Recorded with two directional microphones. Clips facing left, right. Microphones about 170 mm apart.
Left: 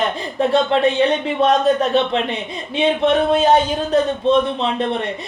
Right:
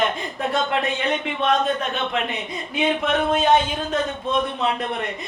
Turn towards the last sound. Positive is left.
turn(degrees=35)  # may be behind; listen again after turning